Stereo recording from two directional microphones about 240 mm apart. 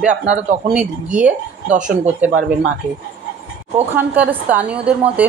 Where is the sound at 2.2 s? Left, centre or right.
Centre.